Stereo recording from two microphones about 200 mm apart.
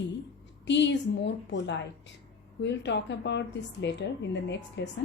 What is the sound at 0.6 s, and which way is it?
A woman's voice, 60° left (ahead or behind).